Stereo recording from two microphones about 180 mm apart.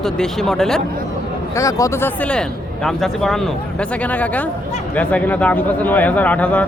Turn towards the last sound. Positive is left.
turn(degrees=10)  # may be behind; listen again after turning